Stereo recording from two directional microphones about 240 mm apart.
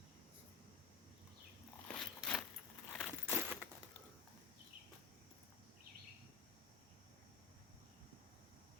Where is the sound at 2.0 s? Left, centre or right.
Centre.